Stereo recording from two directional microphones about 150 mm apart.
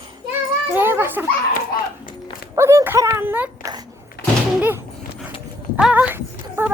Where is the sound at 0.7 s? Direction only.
15° right (ahead or behind).